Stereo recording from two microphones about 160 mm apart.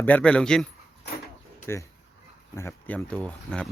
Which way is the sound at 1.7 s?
15° left (ahead or behind).